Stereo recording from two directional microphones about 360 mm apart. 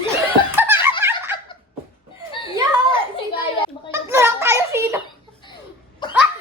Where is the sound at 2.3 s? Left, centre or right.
Centre.